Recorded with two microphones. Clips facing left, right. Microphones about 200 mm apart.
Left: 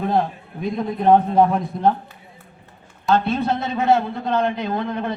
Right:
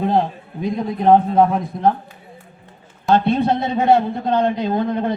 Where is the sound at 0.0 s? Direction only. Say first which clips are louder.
Right 2 dB; 20° right (ahead or behind).